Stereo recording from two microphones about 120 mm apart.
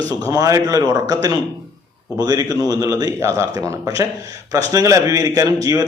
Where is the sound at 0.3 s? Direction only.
30° right (ahead or behind).